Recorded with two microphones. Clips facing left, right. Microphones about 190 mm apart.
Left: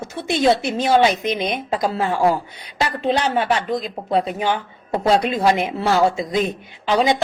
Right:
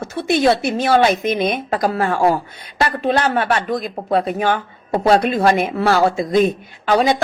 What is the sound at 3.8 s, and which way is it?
Speech, 50° right (ahead or behind).